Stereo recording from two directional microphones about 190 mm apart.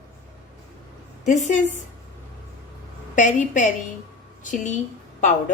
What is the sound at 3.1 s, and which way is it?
Speech, 40° left (ahead or behind).